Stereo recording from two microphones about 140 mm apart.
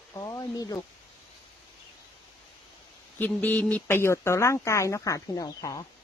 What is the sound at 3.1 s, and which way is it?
Speech, 10° left (ahead or behind).